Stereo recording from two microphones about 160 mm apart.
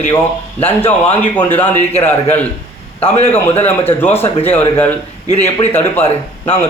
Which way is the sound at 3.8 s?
15° left (ahead or behind).